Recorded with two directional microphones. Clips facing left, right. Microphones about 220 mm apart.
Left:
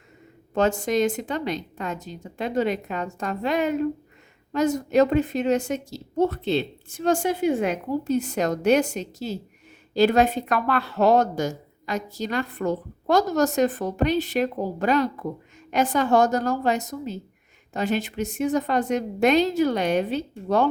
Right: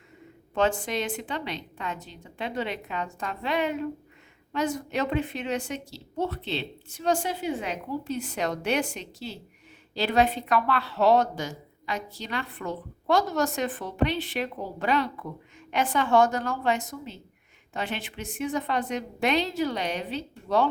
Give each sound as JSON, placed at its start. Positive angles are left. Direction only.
{"t": 0.5, "sound": "speech", "side_deg": 40}